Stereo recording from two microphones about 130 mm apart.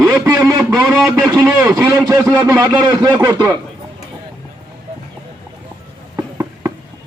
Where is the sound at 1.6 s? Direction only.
20° right (ahead or behind).